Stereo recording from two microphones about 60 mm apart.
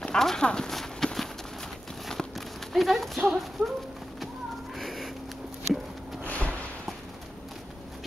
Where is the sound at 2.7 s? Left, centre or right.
Centre.